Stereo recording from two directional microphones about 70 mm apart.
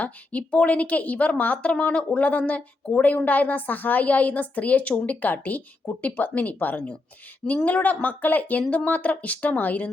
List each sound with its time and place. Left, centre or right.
0.0 s a woman's voice: left